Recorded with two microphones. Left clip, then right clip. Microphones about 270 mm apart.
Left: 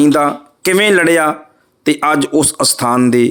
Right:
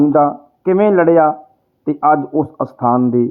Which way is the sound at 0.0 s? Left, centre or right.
Left.